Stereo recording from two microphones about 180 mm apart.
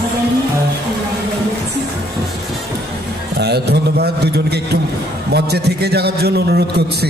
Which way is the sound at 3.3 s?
65° right (ahead or behind).